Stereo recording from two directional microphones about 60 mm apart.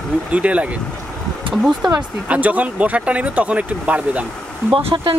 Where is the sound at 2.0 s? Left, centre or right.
Right.